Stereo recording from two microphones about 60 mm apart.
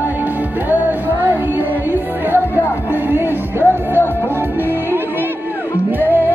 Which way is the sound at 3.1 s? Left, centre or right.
Right.